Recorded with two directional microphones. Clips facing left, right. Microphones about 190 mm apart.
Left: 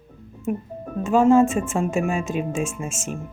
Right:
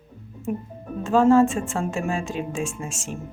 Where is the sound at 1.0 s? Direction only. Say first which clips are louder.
Left 1 dB; 15° left (ahead or behind).